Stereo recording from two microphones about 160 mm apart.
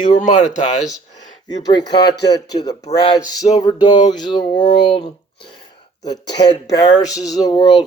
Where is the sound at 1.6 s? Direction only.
25° left (ahead or behind).